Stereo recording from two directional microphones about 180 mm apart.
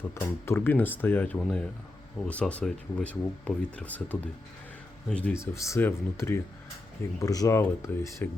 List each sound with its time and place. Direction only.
0.1 s speech: 15° left (ahead or behind)